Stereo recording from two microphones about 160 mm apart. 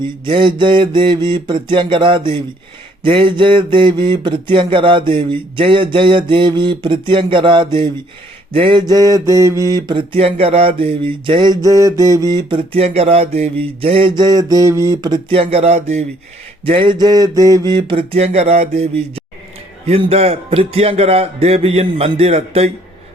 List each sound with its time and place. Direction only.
0.3 s mantra: 30° right (ahead or behind)
16.6 s mantra: 35° right (ahead or behind)